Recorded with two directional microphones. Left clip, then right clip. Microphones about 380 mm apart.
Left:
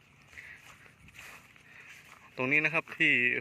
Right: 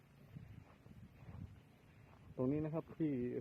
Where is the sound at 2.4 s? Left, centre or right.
Left.